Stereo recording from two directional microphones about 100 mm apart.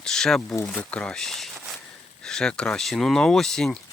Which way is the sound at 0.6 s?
10° left (ahead or behind).